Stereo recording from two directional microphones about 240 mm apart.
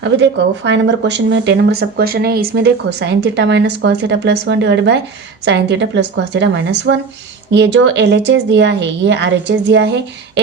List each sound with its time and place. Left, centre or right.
0.0 s speech: right